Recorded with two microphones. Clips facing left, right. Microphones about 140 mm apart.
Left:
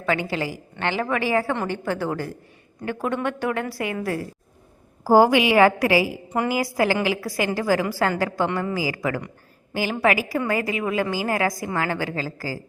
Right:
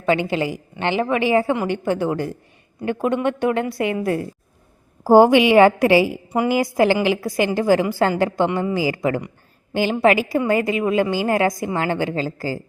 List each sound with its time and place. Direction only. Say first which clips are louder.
0.0 s a woman's voice: right 5 dB; 20° right (ahead or behind)
6.2 s a woman's voice: right 4 dB; 10° right (ahead or behind)
6.5 s a woman's voice: right 5 dB; 25° right (ahead or behind)